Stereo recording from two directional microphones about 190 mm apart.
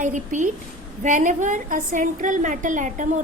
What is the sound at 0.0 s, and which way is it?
A woman's voice, 40° right (ahead or behind).